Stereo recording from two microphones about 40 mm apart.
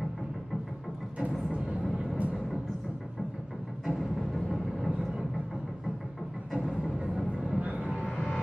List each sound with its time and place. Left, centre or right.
3.8 s vehicle: centre
7.2 s vehicle: centre
7.6 s music: right